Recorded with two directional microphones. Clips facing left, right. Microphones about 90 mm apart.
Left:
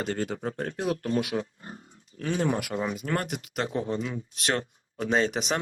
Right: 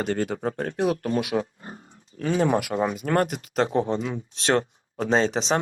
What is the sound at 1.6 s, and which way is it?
Speech, 40° right (ahead or behind).